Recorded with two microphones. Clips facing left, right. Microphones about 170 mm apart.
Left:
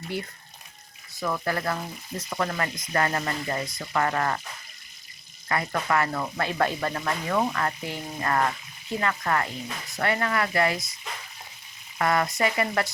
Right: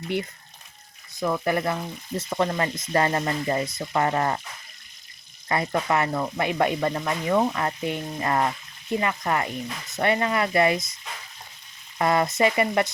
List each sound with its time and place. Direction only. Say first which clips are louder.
0.1 s speech: right 5 dB; 20° right (ahead or behind)
5.5 s speech: right 2 dB; 25° right (ahead or behind)
11.9 s speech: right 3 dB; 25° right (ahead or behind)